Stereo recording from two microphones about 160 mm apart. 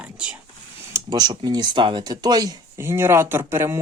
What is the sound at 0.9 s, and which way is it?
Speech, 25° right (ahead or behind).